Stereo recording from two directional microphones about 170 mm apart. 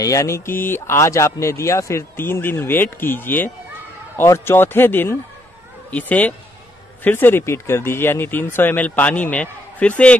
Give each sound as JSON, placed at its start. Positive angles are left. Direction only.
{"t": 0.0, "sound": "speech", "side_deg": 20}